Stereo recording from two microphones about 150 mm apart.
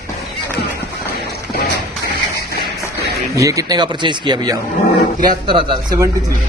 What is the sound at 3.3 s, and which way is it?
Speech, 20° right (ahead or behind).